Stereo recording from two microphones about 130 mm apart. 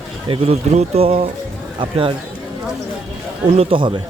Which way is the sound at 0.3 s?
50° right (ahead or behind).